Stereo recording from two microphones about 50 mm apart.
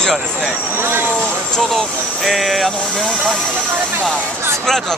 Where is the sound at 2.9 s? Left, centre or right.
Centre.